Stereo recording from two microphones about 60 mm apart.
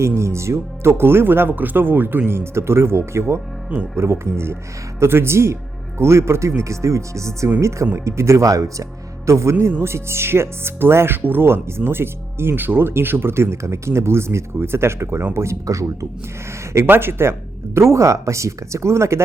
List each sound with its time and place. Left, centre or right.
0.2 s speech: right
15.6 s speech: right
16.7 s speech: right
17.7 s speech: right